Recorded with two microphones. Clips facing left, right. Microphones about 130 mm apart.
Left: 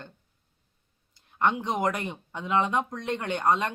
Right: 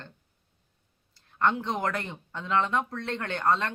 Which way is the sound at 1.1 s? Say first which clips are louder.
Even; 15° left (ahead or behind).